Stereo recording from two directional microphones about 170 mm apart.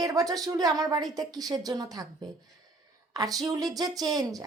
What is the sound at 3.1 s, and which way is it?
Speech, 20° right (ahead or behind).